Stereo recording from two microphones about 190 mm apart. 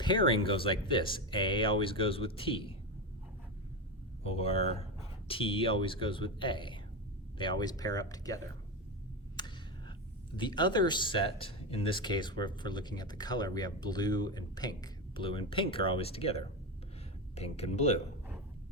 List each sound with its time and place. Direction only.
0.0 s speech: 25° left (ahead or behind)
4.2 s speech: 30° left (ahead or behind)
9.3 s a sound: 20° left (ahead or behind)
10.3 s speech: 25° left (ahead or behind)